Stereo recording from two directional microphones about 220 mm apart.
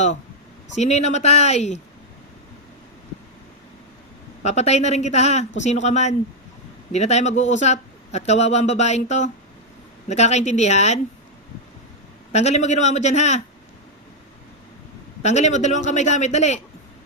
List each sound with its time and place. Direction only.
0.8 s a man's voice: 30° left (ahead or behind)
4.4 s a man's voice: 30° left (ahead or behind)
12.3 s a man's voice: 30° left (ahead or behind)
15.2 s a man's voice: 30° left (ahead or behind)